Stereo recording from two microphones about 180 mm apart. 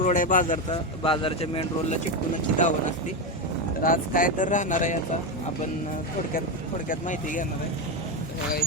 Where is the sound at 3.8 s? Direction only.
50° left (ahead or behind).